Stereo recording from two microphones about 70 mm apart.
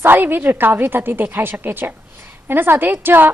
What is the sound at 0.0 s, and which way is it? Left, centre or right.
A woman's voice, right.